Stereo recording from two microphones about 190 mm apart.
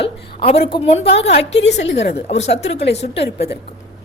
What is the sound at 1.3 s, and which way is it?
Speech, 65° left (ahead or behind).